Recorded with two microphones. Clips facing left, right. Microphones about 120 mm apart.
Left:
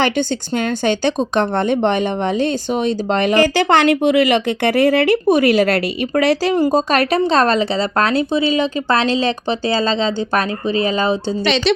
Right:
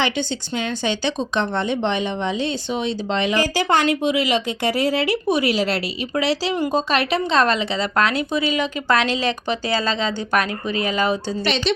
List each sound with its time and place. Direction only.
0.0 s a woman's voice: 50° left (ahead or behind)
6.6 s speech: 40° left (ahead or behind)
11.4 s a woman's voice: 90° left